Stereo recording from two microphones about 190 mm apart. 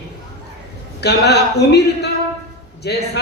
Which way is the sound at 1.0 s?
60° left (ahead or behind).